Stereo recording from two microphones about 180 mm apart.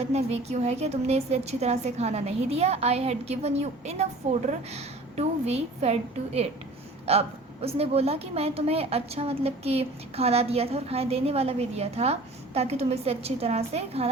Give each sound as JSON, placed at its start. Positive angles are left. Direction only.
{"t": 0.0, "sound": "a woman's voice", "side_deg": -35}